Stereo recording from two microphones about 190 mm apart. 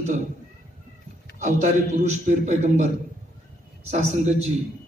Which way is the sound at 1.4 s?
40° right (ahead or behind).